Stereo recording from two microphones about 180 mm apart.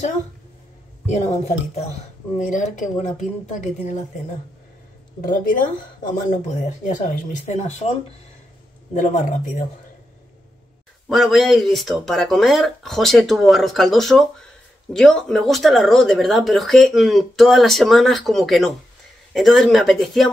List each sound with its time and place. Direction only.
1.0 s speech: 35° left (ahead or behind)
6.0 s speech: 45° left (ahead or behind)
8.9 s speech: 45° left (ahead or behind)
11.1 s speech: centre (ahead or behind)